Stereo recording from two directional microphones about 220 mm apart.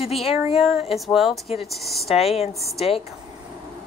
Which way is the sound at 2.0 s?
30° left (ahead or behind).